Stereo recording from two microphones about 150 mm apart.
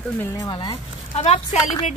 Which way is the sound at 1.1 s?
50° left (ahead or behind).